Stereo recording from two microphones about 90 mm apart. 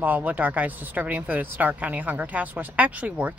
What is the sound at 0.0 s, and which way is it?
A woman's voice, 20° right (ahead or behind).